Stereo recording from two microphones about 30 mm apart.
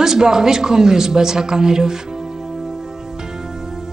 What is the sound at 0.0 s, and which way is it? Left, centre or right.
A woman's voice, right.